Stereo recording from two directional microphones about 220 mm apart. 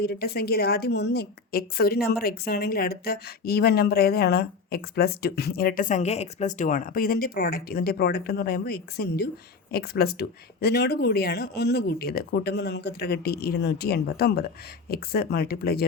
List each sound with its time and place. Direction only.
0.0 s a woman's voice: 45° left (ahead or behind)